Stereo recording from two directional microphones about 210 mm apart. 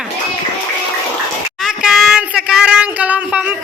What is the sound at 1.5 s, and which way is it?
Child singing, centre (ahead or behind).